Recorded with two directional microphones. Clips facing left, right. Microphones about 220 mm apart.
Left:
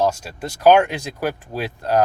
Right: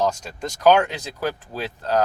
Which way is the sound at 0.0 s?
10° left (ahead or behind).